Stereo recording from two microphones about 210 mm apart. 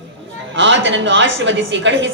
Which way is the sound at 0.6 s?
60° right (ahead or behind).